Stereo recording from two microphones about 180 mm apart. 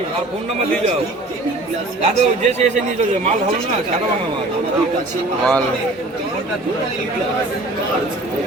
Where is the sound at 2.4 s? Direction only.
40° right (ahead or behind).